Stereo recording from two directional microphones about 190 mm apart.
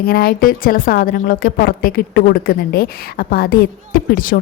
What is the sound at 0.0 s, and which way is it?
A woman's voice, 55° left (ahead or behind).